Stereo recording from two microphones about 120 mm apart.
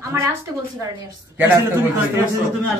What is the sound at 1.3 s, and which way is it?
Speech, 15° right (ahead or behind).